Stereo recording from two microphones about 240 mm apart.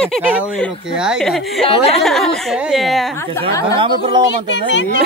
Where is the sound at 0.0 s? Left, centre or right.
Centre.